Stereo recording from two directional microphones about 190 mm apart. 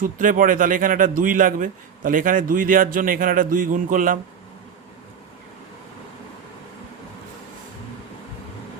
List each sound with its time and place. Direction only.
0.0 s speech: 45° right (ahead or behind)